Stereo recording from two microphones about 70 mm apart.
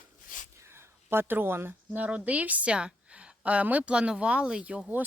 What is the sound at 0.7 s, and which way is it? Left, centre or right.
A woman's voice, right.